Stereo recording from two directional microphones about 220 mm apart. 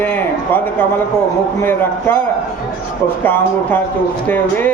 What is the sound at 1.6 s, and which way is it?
Speech, 10° left (ahead or behind).